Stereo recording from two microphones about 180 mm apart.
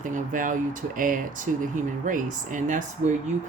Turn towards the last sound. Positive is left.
turn(degrees=-40)  # may be behind; listen again after turning